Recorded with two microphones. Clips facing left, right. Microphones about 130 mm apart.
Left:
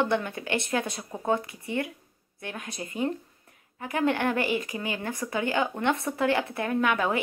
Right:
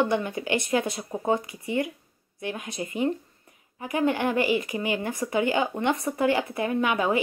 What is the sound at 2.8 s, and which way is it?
Speech, 20° right (ahead or behind).